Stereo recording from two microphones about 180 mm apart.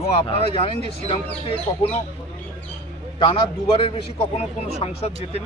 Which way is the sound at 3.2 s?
30° left (ahead or behind).